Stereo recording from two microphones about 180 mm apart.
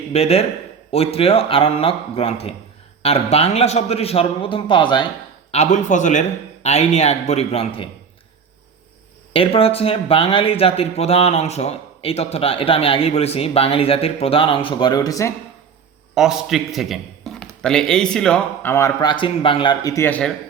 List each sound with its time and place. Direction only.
0.1 s speech: 35° left (ahead or behind)
5.5 s speech: 40° left (ahead or behind)
9.3 s speech: 30° left (ahead or behind)
16.1 s a man's voice: 5° right (ahead or behind)